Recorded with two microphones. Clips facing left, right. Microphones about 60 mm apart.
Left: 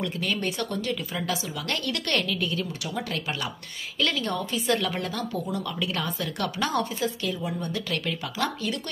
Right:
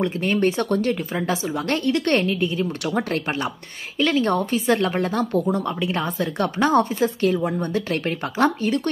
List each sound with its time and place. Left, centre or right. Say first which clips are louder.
0.0 s a woman's voice: right 8 dB; right
4.1 s a woman's voice: right 8 dB; right
5.9 s a woman's voice: right 6 dB; right
6.7 s a woman's voice: right 8 dB; right
7.9 s a woman's voice: right 6 dB; right